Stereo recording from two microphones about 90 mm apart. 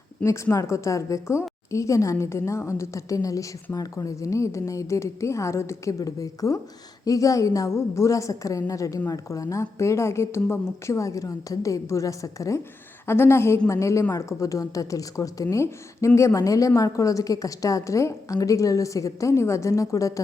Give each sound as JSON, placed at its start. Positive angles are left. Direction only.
{"t": 0.2, "sound": "a woman's voice", "side_deg": 15}
{"t": 0.5, "sound": "a woman's voice", "side_deg": 35}